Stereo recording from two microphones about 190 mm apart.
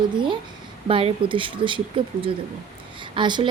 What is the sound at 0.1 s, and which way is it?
A woman's voice, 25° right (ahead or behind).